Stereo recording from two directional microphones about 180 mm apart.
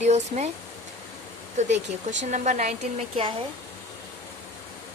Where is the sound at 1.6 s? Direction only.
40° right (ahead or behind).